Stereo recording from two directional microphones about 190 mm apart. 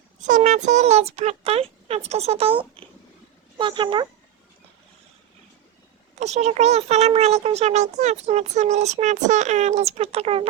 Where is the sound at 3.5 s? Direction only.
25° right (ahead or behind).